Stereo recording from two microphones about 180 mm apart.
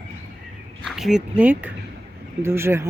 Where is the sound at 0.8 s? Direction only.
Centre (ahead or behind).